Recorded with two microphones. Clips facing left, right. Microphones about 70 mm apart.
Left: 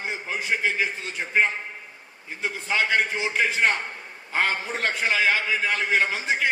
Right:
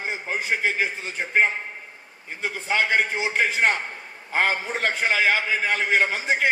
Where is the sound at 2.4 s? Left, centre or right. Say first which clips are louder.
Right 1 dB; right.